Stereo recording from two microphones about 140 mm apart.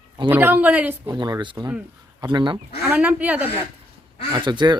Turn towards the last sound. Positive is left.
turn(degrees=-35)  # may be behind; listen again after turning